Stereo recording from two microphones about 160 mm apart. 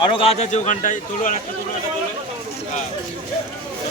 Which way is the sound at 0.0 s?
35° left (ahead or behind).